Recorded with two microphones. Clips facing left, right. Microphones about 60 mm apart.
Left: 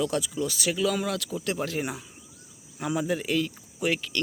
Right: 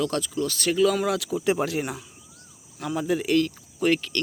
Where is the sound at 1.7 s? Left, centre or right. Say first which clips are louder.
Right 2 dB; centre.